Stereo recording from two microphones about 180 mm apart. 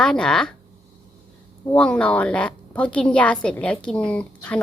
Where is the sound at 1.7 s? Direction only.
5° left (ahead or behind).